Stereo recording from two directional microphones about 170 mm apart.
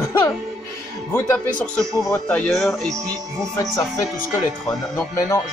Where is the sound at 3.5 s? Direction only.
20° left (ahead or behind).